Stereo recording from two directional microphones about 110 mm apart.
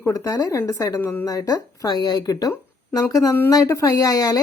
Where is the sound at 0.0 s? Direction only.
30° left (ahead or behind).